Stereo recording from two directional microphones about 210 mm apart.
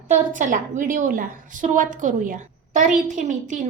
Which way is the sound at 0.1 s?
40° right (ahead or behind).